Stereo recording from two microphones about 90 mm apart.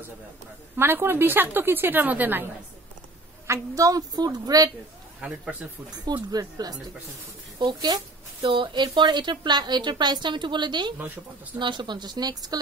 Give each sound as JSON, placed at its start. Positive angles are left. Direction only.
{"t": 0.7, "sound": "a woman's voice", "side_deg": -25}
{"t": 3.4, "sound": "a woman's voice", "side_deg": -35}
{"t": 5.2, "sound": "speech", "side_deg": -5}
{"t": 6.0, "sound": "a woman's voice", "side_deg": -45}
{"t": 8.4, "sound": "a woman's voice", "side_deg": -70}